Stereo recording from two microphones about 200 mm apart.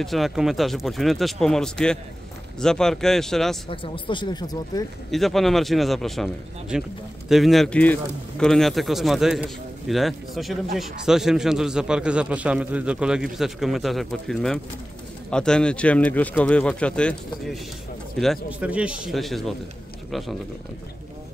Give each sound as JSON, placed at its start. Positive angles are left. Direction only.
{"t": 0.0, "sound": "a man's voice", "side_deg": 0}
{"t": 3.7, "sound": "speech", "side_deg": 25}
{"t": 5.1, "sound": "a man's voice", "side_deg": 0}